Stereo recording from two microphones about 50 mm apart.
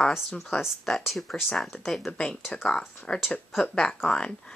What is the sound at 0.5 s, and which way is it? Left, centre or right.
Speech, centre.